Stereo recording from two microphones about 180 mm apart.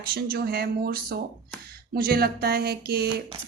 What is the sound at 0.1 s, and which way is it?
A woman's voice, 60° right (ahead or behind).